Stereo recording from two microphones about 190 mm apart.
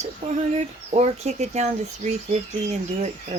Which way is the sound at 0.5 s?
35° right (ahead or behind).